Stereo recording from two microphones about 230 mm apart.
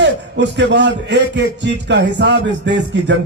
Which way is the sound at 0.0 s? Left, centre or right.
Right.